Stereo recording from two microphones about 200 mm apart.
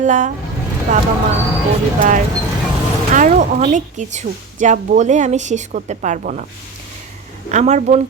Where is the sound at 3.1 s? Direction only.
40° right (ahead or behind).